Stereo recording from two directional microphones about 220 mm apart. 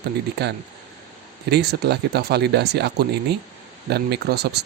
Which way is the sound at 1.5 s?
50° right (ahead or behind).